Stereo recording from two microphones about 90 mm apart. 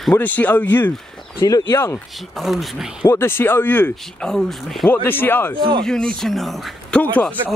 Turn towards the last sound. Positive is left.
turn(degrees=15)  # may be behind; listen again after turning